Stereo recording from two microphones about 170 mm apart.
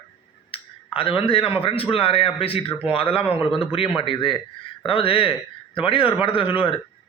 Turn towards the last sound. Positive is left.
turn(degrees=30)  # may be behind; listen again after turning